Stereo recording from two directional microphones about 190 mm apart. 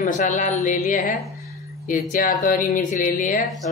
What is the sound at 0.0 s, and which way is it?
Speech, 40° left (ahead or behind).